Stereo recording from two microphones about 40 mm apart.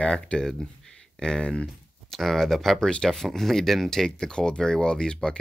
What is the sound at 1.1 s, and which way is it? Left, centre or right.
Speech, centre.